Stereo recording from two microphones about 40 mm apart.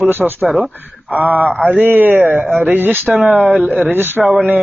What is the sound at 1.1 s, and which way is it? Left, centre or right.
Speech, right.